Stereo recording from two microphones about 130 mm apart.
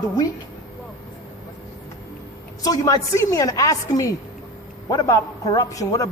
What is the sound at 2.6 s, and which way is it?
A man's voice, 25° left (ahead or behind).